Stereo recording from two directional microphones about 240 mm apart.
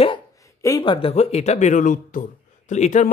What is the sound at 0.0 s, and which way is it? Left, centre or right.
Speech, centre.